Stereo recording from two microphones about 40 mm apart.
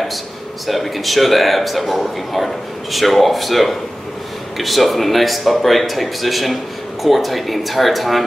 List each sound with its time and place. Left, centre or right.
0.7 s speech: centre